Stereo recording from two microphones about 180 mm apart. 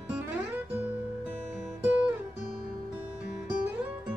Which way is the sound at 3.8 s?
5° right (ahead or behind).